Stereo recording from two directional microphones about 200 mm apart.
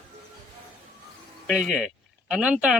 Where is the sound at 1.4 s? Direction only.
Centre (ahead or behind).